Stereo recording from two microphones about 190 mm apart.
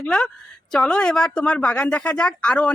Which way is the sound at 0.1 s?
5° left (ahead or behind).